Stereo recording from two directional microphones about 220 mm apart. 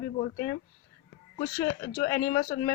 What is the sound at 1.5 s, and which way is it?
Speech, 10° left (ahead or behind).